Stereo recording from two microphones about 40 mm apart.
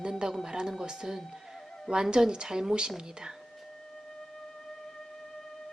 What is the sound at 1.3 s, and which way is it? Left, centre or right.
Music, centre.